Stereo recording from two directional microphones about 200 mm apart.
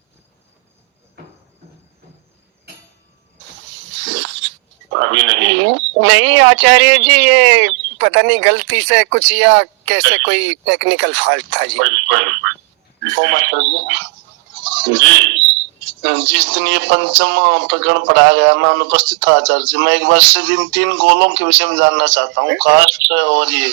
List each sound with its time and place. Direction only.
3.9 s dog: 65° right (ahead or behind)
4.9 s speech: 65° right (ahead or behind)